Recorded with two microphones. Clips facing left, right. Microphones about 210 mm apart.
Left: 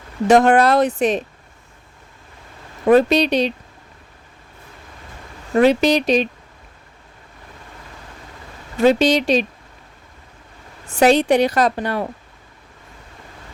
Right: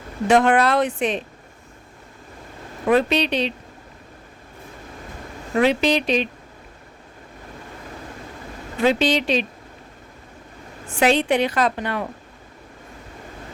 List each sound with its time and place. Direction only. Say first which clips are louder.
0.3 s a woman's voice: left 4 dB; 40° left (ahead or behind)
2.9 s a woman's voice: left 5 dB; 40° left (ahead or behind)
5.5 s a woman's voice: left 4 dB; 40° left (ahead or behind)
8.8 s speech: left 4 dB; 40° left (ahead or behind)
10.8 s a woman's voice: left 4 dB; 40° left (ahead or behind)